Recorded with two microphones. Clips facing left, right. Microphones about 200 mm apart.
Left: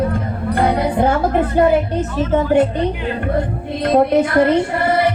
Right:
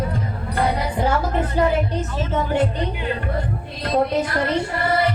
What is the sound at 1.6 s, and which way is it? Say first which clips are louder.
Speech: left 6 dB; 55° left (ahead or behind).